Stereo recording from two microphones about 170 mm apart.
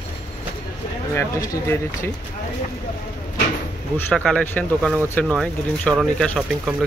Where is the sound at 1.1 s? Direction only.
20° left (ahead or behind).